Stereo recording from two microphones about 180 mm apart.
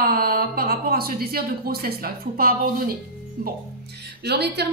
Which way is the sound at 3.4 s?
65° right (ahead or behind).